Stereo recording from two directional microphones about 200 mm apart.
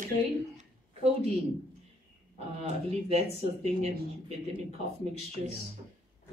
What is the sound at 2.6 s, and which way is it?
Speech, 30° right (ahead or behind).